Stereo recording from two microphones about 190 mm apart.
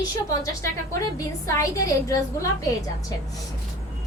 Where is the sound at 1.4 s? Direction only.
15° left (ahead or behind).